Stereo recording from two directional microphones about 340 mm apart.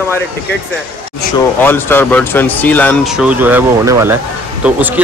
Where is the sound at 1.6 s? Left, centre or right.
Centre.